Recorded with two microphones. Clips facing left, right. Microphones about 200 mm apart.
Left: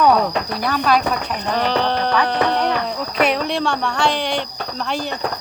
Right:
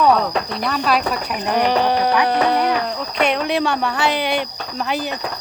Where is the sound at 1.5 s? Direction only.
15° right (ahead or behind).